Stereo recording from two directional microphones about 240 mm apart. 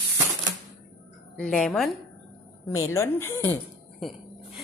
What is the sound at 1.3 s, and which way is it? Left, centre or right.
A woman's voice, centre.